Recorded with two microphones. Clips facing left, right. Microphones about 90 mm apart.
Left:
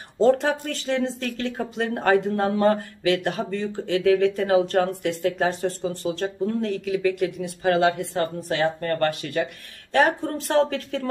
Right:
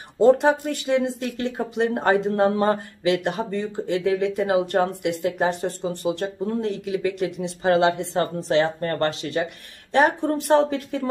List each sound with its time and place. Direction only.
0.2 s speech: 15° right (ahead or behind)